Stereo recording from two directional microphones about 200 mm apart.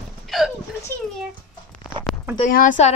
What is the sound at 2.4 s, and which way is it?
Speech, 40° left (ahead or behind).